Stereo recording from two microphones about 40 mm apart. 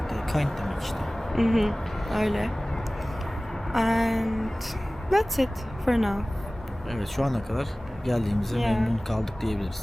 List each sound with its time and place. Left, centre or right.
0.1 s speech: centre
3.7 s speech: centre